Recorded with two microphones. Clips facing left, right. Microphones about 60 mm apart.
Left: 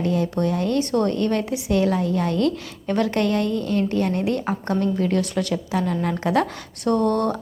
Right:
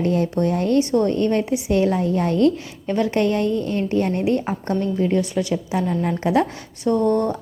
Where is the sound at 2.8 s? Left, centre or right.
Centre.